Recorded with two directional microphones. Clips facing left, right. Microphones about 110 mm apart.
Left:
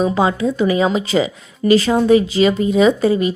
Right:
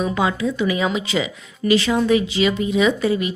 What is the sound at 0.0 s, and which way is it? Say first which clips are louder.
Speech: left 4 dB; 30° left (ahead or behind).